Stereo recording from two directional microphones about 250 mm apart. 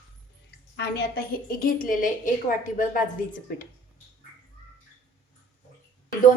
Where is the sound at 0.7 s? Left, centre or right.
Left.